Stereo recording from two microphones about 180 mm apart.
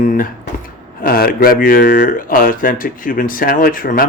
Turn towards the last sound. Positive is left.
turn(degrees=50)  # may be behind; listen again after turning